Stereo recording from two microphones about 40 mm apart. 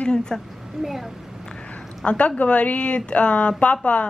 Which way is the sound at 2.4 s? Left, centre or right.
Left.